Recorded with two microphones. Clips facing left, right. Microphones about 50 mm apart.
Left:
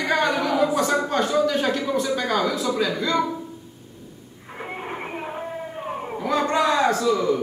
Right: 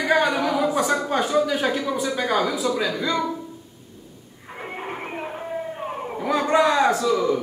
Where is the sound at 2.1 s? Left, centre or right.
Centre.